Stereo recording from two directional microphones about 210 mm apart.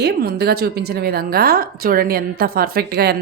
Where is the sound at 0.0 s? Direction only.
50° right (ahead or behind).